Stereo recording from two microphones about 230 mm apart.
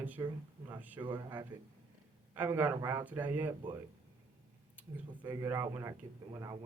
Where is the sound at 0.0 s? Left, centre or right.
Centre.